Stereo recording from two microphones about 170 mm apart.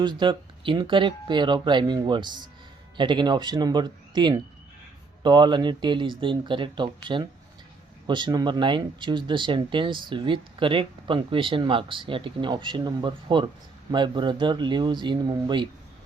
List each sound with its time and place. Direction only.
0.2 s speech: 30° right (ahead or behind)